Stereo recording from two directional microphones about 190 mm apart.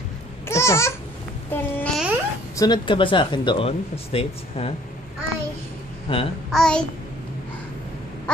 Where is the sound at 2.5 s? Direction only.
20° left (ahead or behind).